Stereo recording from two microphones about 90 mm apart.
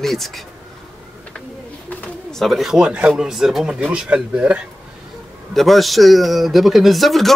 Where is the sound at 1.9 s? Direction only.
15° left (ahead or behind).